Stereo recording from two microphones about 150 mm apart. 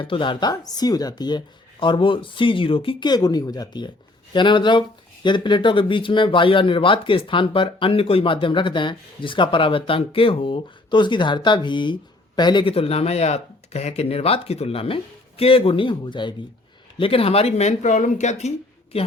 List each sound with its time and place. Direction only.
0.0 s speech: 35° left (ahead or behind); by 18.5 s 50° left (ahead or behind)